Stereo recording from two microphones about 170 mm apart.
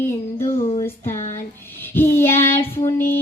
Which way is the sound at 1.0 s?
45° left (ahead or behind).